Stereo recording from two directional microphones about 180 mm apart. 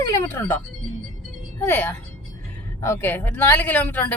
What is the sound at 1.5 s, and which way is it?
A woman's voice, 10° left (ahead or behind).